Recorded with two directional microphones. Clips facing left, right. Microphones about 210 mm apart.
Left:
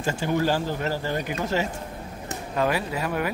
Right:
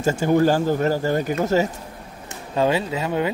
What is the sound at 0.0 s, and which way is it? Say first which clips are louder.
Speech: right 7 dB; 45° right (ahead or behind).